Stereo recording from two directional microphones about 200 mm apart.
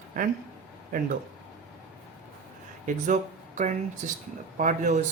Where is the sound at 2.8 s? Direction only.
40° right (ahead or behind).